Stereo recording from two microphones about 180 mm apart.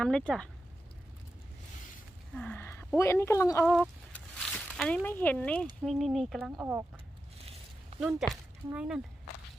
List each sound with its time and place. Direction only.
0.0 s speech: 5° left (ahead or behind)
2.3 s a sound: 10° left (ahead or behind)
3.0 s speech: 15° left (ahead or behind)
3.7 s a sound: 5° left (ahead or behind)
5.0 s speech: 10° left (ahead or behind); by 6.8 s 10° right (ahead or behind)
8.0 s speech: 5° right (ahead or behind)